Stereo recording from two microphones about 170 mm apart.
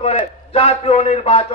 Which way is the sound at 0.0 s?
35° left (ahead or behind).